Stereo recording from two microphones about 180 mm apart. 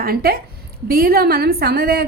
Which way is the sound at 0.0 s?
55° right (ahead or behind).